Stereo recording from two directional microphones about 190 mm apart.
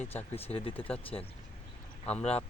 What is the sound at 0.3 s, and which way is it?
Speech, 30° left (ahead or behind).